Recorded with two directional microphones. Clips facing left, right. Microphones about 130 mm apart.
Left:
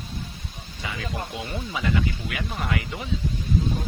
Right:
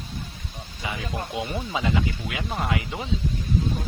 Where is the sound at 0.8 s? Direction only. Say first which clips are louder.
Right 1 dB; 20° right (ahead or behind).